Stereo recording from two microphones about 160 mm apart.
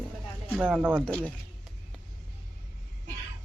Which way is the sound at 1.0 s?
5° left (ahead or behind).